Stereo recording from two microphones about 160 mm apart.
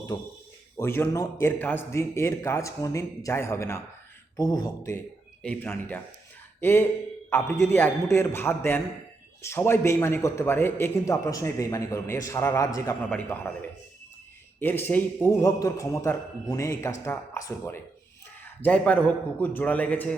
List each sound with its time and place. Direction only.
0.1 s a man's voice: 25° left (ahead or behind)
5.4 s a man's voice: 10° left (ahead or behind)
13.1 s a man's voice: 10° left (ahead or behind)